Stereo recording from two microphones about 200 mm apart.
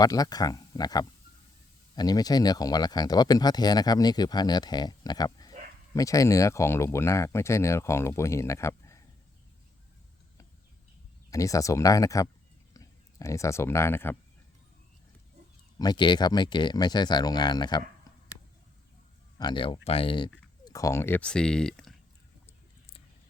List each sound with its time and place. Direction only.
0.0 s speech: 20° left (ahead or behind)
11.3 s speech: 15° left (ahead or behind)
15.8 s speech: 20° left (ahead or behind)
19.4 s speech: 25° left (ahead or behind); by 21.9 s 5° left (ahead or behind)